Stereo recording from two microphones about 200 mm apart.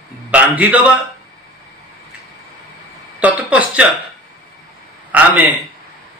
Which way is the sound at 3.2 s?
5° right (ahead or behind).